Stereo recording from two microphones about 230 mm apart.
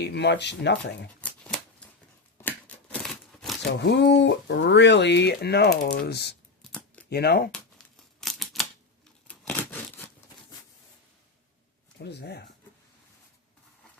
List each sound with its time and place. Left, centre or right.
0.0 s speech: left
2.4 s scissors: centre
3.6 s speech: left
6.6 s shuffling cards: centre
7.1 s speech: left
8.2 s a sound: centre
11.9 s speech: left